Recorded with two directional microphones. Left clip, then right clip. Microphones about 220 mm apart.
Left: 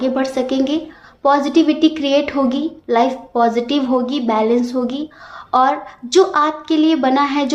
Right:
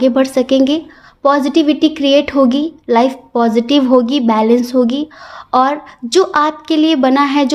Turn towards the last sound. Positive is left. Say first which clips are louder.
# right 4 dB
turn(degrees=-40)  # may be behind; listen again after turning